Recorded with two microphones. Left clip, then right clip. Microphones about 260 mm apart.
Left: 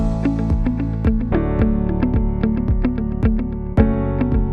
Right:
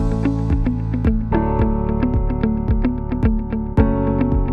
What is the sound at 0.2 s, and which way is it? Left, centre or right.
Music, centre.